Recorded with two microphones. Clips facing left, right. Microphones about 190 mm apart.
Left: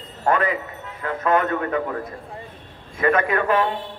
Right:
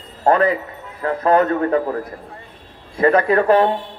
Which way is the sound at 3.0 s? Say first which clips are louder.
Right 5 dB; 35° right (ahead or behind).